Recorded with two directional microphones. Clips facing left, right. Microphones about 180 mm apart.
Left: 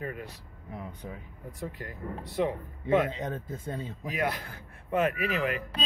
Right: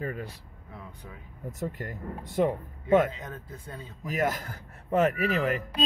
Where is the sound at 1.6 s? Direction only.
45° right (ahead or behind).